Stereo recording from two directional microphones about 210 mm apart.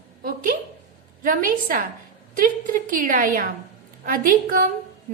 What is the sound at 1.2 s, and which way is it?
A woman's voice, 40° right (ahead or behind).